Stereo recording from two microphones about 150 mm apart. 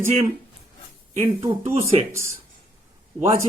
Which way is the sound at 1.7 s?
45° right (ahead or behind).